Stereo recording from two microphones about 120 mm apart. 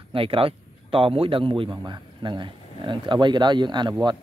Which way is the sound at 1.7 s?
35° right (ahead or behind).